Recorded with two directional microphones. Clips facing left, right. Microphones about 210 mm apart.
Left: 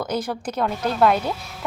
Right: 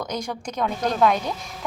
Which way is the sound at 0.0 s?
5° left (ahead or behind).